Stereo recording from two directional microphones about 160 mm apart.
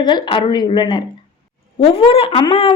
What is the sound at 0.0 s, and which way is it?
A woman's voice, 30° left (ahead or behind).